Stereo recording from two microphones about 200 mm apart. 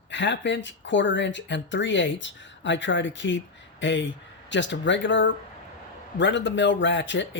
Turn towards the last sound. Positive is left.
turn(degrees=65)  # may be behind; listen again after turning